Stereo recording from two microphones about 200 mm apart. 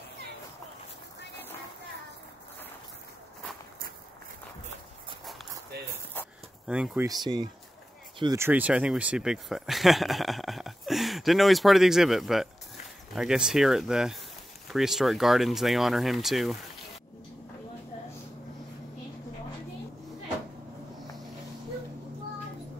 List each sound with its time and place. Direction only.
6.7 s speech: 5° right (ahead or behind)
7.1 s speech: 20° right (ahead or behind); by 16.5 s centre (ahead or behind)